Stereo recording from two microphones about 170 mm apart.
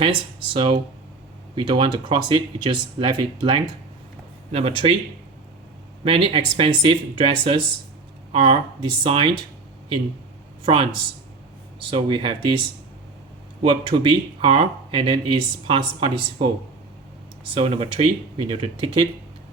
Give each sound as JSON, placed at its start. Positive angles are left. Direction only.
{"t": 0.0, "sound": "speech", "side_deg": -30}
{"t": 4.8, "sound": "speech", "side_deg": -40}
{"t": 6.1, "sound": "speech", "side_deg": -30}
{"t": 10.6, "sound": "speech", "side_deg": -30}
{"t": 17.5, "sound": "speech", "side_deg": -35}